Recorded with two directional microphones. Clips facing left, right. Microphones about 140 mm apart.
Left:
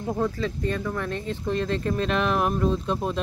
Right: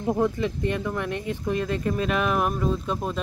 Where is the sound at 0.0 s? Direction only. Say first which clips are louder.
Right 3 dB; 15° right (ahead or behind).